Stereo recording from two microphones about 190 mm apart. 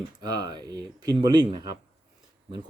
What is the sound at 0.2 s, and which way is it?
Speech, 20° right (ahead or behind).